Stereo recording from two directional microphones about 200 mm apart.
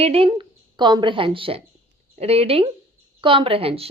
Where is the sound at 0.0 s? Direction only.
30° right (ahead or behind).